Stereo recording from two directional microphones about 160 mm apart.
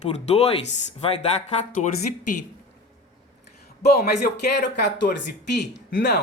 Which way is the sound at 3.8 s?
90° left.